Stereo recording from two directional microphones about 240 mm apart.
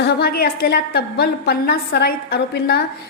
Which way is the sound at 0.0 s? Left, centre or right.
Left.